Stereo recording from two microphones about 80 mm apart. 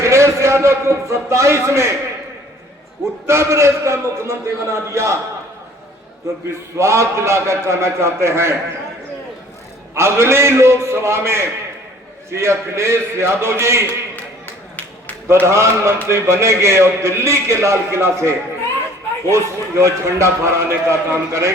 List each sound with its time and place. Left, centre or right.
0.0 s a man's voice: right
3.2 s a man's voice: right
6.7 s a man's voice: right
9.9 s a man's voice: right
15.3 s a man's voice: right